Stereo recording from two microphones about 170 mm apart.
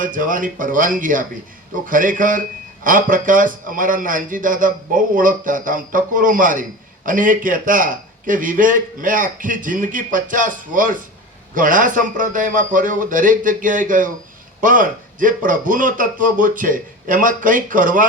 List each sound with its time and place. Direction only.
0.0 s a man's voice: 50° right (ahead or behind)